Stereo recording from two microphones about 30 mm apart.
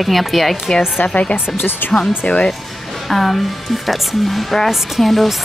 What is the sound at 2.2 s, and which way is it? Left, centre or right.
Speech, left.